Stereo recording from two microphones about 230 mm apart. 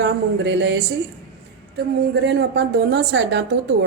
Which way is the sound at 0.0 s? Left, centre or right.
Right.